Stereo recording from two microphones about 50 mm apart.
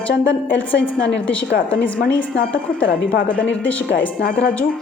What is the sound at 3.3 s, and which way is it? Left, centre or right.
Speech, left.